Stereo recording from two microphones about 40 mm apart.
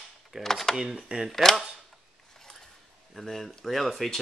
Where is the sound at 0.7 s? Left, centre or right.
Centre.